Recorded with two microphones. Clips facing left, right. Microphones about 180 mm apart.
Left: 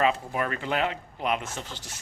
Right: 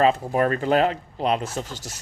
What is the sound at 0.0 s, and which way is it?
Speech, 40° right (ahead or behind).